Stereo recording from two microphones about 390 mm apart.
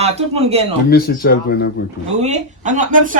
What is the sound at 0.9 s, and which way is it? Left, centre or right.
Speech, left.